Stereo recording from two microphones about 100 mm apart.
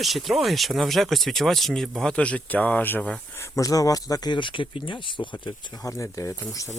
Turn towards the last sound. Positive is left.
turn(degrees=30)  # may be behind; listen again after turning